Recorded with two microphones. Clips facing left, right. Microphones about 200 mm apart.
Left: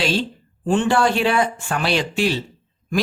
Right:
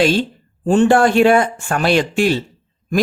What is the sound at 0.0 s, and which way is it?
Speech, 50° right (ahead or behind).